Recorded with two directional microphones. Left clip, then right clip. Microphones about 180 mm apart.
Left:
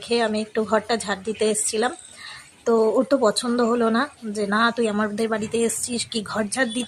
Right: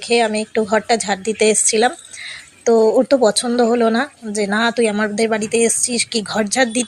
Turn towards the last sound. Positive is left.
turn(degrees=-20)  # may be behind; listen again after turning